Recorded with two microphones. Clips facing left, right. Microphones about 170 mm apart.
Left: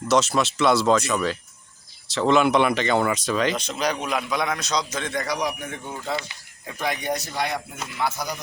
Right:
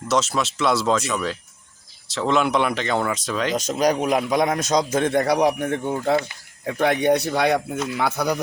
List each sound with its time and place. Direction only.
0.1 s speech: centre (ahead or behind)
3.6 s a man's voice: 45° right (ahead or behind); by 8.4 s 60° right (ahead or behind)